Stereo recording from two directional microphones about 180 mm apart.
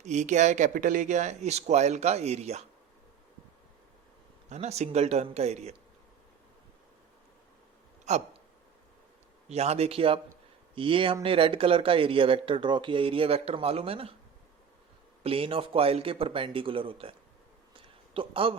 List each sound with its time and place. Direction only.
0.0 s speech: 40° right (ahead or behind)
4.4 s speech: 40° right (ahead or behind)
8.0 s hiccup: 40° right (ahead or behind)
9.5 s speech: 35° right (ahead or behind)
15.2 s speech: 30° right (ahead or behind)
17.7 s a sound: 30° right (ahead or behind)